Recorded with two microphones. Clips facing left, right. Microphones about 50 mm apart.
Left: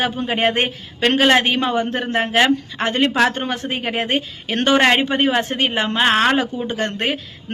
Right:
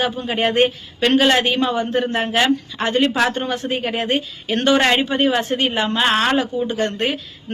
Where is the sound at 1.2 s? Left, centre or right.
Left.